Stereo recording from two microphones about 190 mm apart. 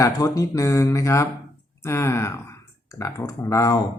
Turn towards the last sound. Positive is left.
turn(degrees=15)  # may be behind; listen again after turning